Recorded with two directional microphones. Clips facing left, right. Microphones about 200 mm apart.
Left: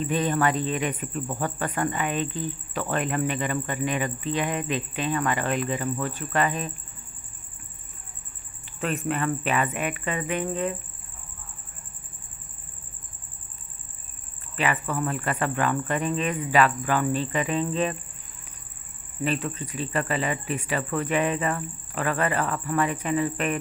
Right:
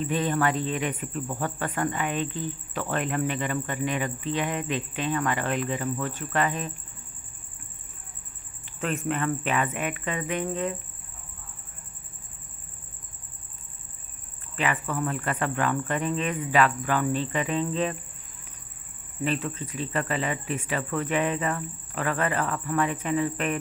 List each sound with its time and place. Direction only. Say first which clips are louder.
0.1 s speech: left 2 dB; 15° left (ahead or behind)
8.6 s speech: left 1 dB; 5° left (ahead or behind)
14.6 s speech: left 1 dB; 10° left (ahead or behind)
19.2 s speech: left 1 dB; 10° left (ahead or behind)